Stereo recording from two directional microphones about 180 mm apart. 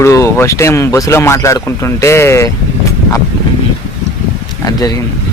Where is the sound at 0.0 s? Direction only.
15° left (ahead or behind).